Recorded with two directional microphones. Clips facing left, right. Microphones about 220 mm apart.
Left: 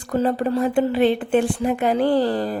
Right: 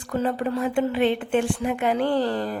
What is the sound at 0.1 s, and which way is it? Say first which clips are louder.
A woman's voice: left 4 dB; 35° left (ahead or behind).